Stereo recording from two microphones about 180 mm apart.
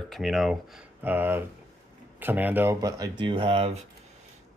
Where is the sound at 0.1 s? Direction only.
Centre (ahead or behind).